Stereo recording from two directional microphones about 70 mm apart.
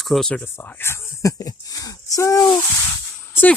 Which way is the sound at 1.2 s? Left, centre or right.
Left.